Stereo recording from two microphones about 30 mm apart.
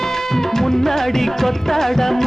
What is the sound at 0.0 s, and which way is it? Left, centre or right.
Music, centre.